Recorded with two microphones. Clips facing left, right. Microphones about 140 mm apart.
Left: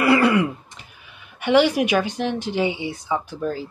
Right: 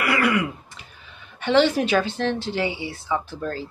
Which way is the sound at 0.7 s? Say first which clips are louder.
Even; 15° left (ahead or behind).